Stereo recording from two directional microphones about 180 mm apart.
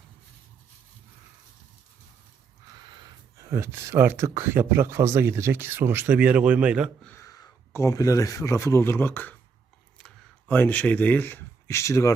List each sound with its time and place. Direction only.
3.3 s speech: 15° right (ahead or behind)
7.0 s speech: 15° left (ahead or behind)
10.5 s speech: 10° left (ahead or behind)